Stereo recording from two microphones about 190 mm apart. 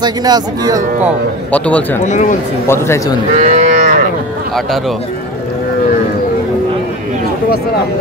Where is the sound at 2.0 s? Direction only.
40° left (ahead or behind).